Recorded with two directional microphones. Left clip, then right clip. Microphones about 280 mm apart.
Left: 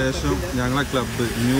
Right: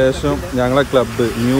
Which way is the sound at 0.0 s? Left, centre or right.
Centre.